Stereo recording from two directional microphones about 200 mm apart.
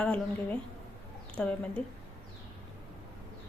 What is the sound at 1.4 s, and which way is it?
Speech, 5° left (ahead or behind).